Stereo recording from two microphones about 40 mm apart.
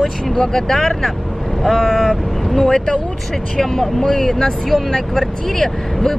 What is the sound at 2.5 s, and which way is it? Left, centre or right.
Speech, centre.